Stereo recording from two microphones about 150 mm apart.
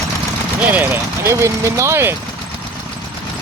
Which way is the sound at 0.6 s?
10° right (ahead or behind).